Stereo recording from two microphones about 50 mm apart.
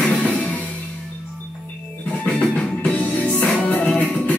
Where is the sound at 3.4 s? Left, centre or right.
Left.